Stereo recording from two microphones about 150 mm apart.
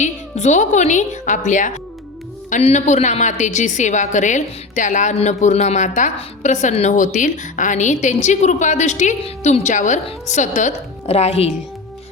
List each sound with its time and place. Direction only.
0.0 s a woman's voice: 50° left (ahead or behind)